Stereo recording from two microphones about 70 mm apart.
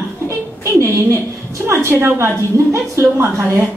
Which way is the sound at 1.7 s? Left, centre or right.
Right.